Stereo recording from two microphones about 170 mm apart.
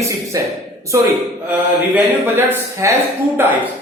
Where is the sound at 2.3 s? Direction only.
15° right (ahead or behind).